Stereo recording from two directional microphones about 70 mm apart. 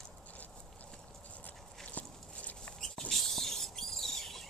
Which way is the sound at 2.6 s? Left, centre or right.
Centre.